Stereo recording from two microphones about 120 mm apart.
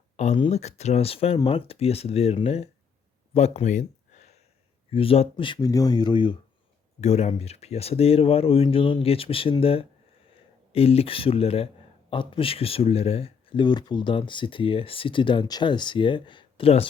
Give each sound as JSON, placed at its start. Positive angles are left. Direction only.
{"t": 0.2, "sound": "speech", "side_deg": 75}
{"t": 3.3, "sound": "a sound", "side_deg": 65}
{"t": 4.9, "sound": "speech", "side_deg": 55}
{"t": 5.5, "sound": "speech", "side_deg": 30}
{"t": 7.0, "sound": "speech", "side_deg": 65}